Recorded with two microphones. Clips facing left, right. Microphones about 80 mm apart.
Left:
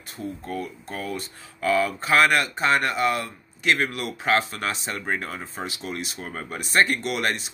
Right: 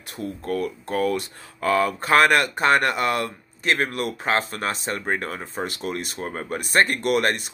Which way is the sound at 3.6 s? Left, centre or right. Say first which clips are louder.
Right 1 dB; right.